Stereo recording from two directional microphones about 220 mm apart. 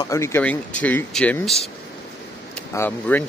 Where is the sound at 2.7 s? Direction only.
10° left (ahead or behind).